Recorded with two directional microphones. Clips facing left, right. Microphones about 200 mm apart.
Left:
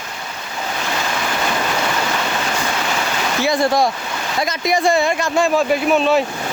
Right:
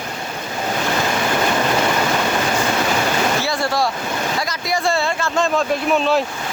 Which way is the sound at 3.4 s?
20° left (ahead or behind).